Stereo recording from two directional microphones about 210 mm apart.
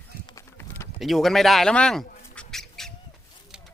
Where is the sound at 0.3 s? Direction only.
15° left (ahead or behind).